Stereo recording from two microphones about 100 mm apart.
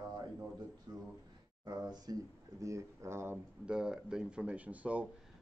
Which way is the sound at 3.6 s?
10° right (ahead or behind).